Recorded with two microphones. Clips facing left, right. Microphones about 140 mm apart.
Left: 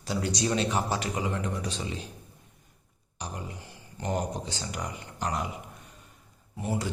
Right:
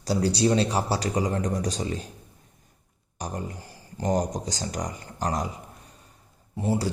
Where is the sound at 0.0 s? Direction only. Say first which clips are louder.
Right 6 dB; 35° right (ahead or behind).